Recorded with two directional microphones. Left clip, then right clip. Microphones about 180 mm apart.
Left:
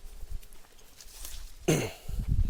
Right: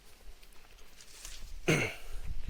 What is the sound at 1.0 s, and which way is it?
Cough, 30° left (ahead or behind).